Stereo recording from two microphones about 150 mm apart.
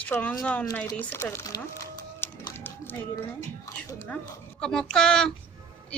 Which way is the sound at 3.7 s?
25° left (ahead or behind).